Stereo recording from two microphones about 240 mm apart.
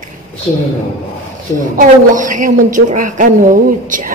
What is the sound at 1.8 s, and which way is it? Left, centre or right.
A woman's voice, right.